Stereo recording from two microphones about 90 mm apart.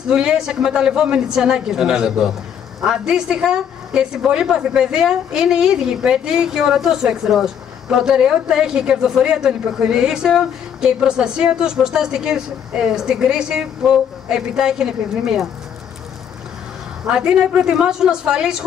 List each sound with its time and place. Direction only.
0.1 s speech: 10° right (ahead or behind)
17.0 s speech: 10° right (ahead or behind)